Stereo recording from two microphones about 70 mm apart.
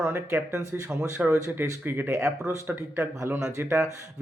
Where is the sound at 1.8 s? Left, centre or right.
Right.